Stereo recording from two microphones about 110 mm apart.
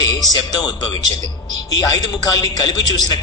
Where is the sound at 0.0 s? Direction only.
40° left (ahead or behind).